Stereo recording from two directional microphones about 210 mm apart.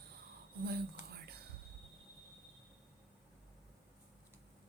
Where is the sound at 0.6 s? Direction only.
50° right (ahead or behind).